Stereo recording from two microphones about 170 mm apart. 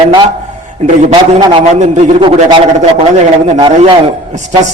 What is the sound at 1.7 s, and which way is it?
Speech, 40° right (ahead or behind).